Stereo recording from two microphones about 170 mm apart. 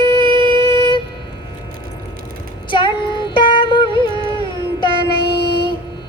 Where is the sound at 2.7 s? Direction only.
30° left (ahead or behind).